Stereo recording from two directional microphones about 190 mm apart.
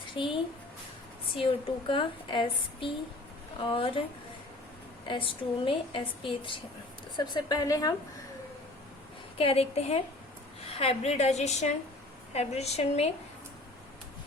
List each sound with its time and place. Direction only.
0.1 s a woman's voice: 25° left (ahead or behind)
1.4 s a woman's voice: 25° left (ahead or behind)
5.0 s a woman's voice: 25° left (ahead or behind)
9.4 s a woman's voice: 30° left (ahead or behind)